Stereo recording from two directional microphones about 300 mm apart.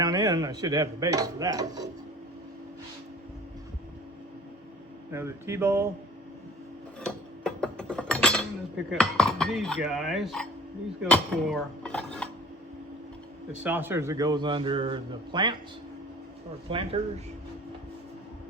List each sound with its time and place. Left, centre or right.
0.0 s a man's voice: centre
5.1 s a man's voice: centre
7.4 s a sound: centre
8.9 s speech: centre
11.0 s dishes: centre
13.6 s a man's voice: centre
16.6 s a man's voice: centre